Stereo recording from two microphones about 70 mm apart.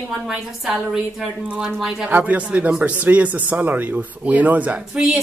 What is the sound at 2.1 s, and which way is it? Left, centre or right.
Speech, right.